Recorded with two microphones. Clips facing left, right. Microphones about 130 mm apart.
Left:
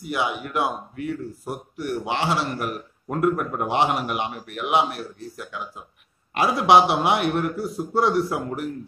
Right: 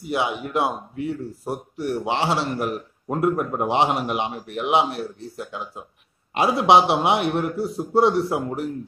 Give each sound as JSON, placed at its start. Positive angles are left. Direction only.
{"t": 0.0, "sound": "speech", "side_deg": -25}